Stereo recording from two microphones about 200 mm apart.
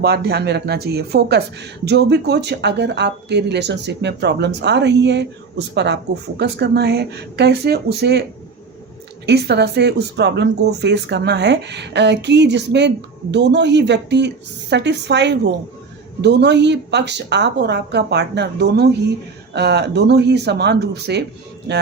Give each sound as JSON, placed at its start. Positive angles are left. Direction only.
{"t": 0.0, "sound": "speech", "side_deg": -55}
{"t": 9.2, "sound": "speech", "side_deg": -55}